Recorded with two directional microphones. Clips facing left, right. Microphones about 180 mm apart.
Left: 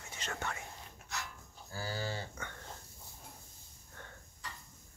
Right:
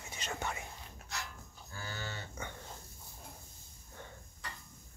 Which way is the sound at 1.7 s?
35° left (ahead or behind).